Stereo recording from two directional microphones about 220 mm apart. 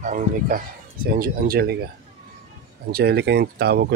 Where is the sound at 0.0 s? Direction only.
35° right (ahead or behind).